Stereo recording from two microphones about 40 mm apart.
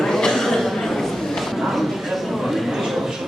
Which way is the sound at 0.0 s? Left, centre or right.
Centre.